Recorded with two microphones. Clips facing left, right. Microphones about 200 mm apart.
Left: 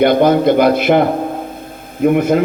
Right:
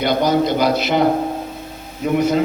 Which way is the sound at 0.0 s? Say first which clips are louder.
Left 6 dB; 55° left (ahead or behind).